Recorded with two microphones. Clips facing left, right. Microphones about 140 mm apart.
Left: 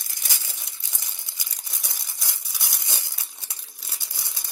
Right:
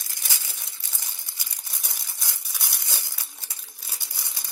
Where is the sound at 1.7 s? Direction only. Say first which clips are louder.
Even; 15° left (ahead or behind).